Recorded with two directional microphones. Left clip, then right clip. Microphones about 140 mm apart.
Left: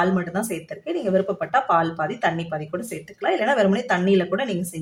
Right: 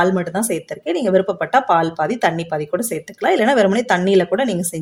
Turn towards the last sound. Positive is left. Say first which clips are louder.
# right 5 dB
turn(degrees=-45)  # may be behind; listen again after turning